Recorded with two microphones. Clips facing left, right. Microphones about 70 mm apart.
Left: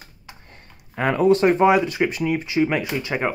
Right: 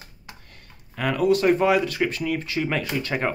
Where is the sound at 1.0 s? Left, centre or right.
Left; by 3.3 s centre.